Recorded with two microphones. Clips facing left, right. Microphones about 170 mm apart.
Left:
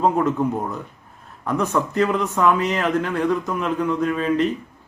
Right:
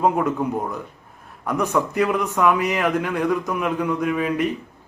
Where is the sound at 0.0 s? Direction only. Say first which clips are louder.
Left 1 dB; 10° right (ahead or behind).